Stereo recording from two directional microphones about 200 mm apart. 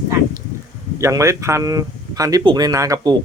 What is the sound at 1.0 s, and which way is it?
Speech, 15° right (ahead or behind).